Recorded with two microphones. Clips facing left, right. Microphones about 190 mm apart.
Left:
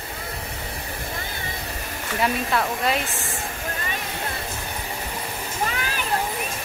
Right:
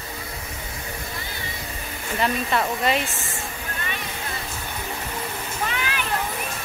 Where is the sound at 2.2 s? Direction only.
Centre (ahead or behind).